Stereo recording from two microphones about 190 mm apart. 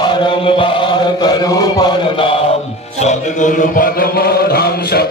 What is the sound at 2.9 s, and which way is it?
Music, 40° left (ahead or behind).